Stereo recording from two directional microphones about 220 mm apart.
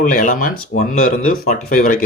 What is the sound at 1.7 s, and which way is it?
Speech, 35° left (ahead or behind).